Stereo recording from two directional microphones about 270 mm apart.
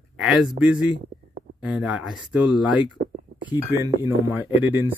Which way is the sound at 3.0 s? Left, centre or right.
Right.